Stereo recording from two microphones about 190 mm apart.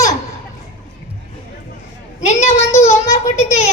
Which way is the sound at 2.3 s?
35° left (ahead or behind).